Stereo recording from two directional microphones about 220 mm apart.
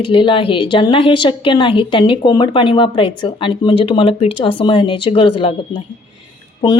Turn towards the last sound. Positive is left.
turn(degrees=25)  # may be behind; listen again after turning